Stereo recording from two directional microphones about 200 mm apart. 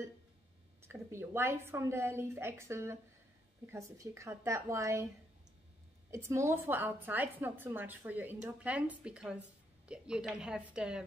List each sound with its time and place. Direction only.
0.8 s a woman's voice: 10° right (ahead or behind)
6.0 s a woman's voice: 15° right (ahead or behind)